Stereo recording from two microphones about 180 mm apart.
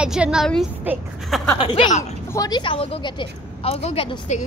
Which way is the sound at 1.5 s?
30° left (ahead or behind).